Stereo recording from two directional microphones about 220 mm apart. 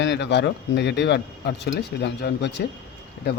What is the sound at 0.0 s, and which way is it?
Speech, 50° left (ahead or behind).